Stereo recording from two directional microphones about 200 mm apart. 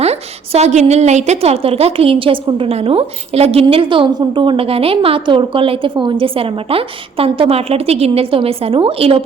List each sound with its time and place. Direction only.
0.0 s a woman's voice: 30° right (ahead or behind)